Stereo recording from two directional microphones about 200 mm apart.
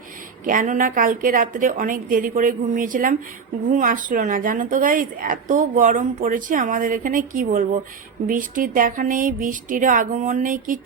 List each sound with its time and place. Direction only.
0.4 s a woman's voice: 40° right (ahead or behind)